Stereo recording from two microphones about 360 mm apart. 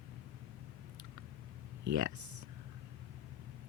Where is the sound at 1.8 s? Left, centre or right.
Right.